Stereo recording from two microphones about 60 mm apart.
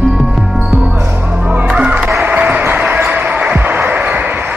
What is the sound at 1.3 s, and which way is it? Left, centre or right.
Music, right.